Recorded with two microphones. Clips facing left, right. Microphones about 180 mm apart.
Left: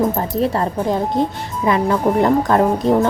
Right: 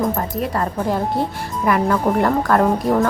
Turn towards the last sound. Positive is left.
turn(degrees=25)  # may be behind; listen again after turning